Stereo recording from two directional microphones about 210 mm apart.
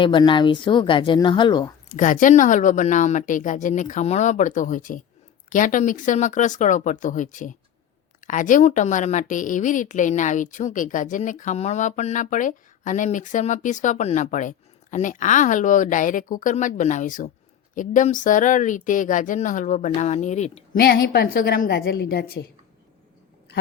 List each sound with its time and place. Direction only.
0.0 s speech: 25° left (ahead or behind)
1.9 s a woman's voice: 40° left (ahead or behind)
20.8 s a woman's voice: 45° left (ahead or behind)